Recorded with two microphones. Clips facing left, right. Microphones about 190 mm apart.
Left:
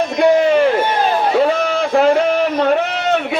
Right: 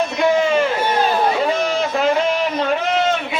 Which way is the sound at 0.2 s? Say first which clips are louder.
Left 5 dB; 60° left (ahead or behind).